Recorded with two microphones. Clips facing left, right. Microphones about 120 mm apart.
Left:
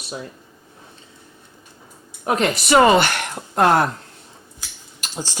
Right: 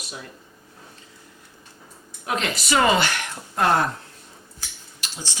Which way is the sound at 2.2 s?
50° left (ahead or behind).